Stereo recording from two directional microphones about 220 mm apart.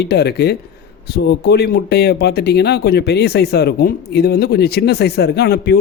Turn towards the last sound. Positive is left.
turn(degrees=50)  # may be behind; listen again after turning